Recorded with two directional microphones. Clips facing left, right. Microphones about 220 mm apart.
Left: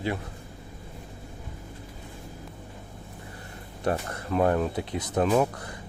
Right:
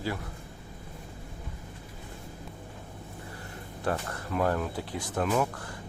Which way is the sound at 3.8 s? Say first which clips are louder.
Left 4 dB; 20° left (ahead or behind).